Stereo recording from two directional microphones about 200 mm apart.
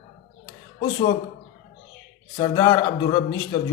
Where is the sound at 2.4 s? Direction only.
20° left (ahead or behind).